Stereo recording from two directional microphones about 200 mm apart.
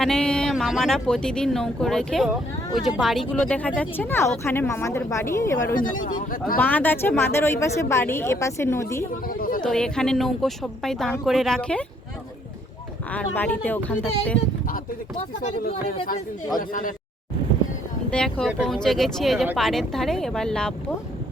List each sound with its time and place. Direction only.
0.0 s speech: 5° left (ahead or behind)
5.7 s speech: 40° left (ahead or behind)
6.6 s speech: 10° left (ahead or behind)
9.2 s speech: 45° left (ahead or behind)
9.6 s speech: 5° left (ahead or behind)
13.1 s speech: 10° left (ahead or behind)
15.4 s speech: 45° left (ahead or behind)
18.1 s speech: 5° left (ahead or behind)